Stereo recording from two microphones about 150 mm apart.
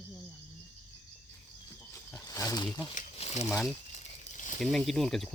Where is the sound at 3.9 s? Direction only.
50° left (ahead or behind).